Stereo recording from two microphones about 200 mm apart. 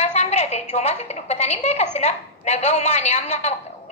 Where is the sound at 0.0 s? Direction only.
35° left (ahead or behind).